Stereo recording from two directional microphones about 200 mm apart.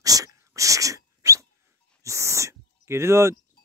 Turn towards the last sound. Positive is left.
turn(degrees=-15)  # may be behind; listen again after turning